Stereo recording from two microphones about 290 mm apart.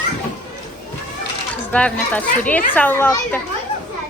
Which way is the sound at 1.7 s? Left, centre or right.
Centre.